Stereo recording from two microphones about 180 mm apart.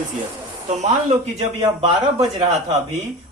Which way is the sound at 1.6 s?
30° right (ahead or behind).